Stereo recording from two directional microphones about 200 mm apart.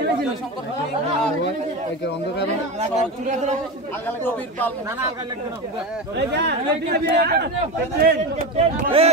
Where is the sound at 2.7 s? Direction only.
35° right (ahead or behind).